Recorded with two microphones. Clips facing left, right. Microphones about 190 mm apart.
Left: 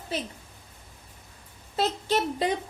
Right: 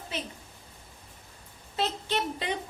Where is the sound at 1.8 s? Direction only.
40° left (ahead or behind).